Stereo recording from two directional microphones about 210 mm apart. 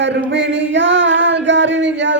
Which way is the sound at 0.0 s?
60° right (ahead or behind).